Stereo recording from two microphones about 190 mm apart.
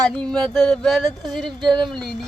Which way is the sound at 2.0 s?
Centre (ahead or behind).